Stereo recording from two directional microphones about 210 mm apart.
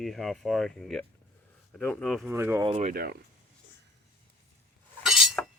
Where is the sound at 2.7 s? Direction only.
35° right (ahead or behind).